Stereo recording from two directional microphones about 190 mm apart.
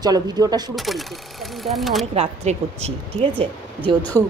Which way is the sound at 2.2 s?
35° right (ahead or behind).